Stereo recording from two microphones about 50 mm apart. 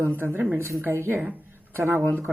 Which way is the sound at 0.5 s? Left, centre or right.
Right.